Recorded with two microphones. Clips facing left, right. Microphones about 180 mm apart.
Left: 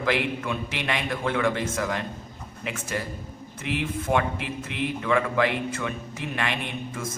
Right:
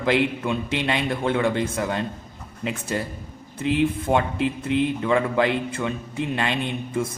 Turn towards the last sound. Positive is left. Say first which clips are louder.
# right 7 dB
turn(degrees=-30)  # may be behind; listen again after turning